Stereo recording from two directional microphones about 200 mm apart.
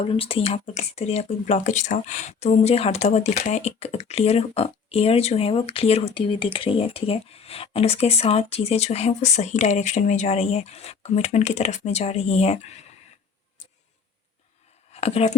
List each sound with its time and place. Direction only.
0.1 s speech: 25° left (ahead or behind)
15.0 s speech: 35° left (ahead or behind)